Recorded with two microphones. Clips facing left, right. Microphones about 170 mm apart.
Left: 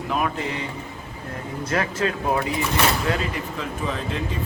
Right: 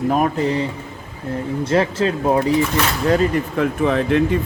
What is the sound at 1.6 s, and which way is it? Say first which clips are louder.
Speech: right 6 dB; 30° right (ahead or behind).